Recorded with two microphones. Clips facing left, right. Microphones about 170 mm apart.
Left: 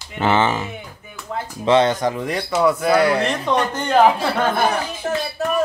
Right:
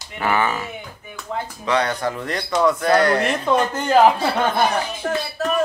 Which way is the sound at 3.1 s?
5° right (ahead or behind).